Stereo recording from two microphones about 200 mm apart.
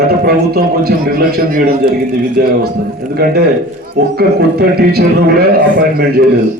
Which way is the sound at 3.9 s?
50° right (ahead or behind).